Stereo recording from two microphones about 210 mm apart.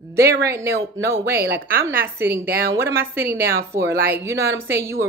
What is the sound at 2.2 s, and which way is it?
Speech, 45° right (ahead or behind).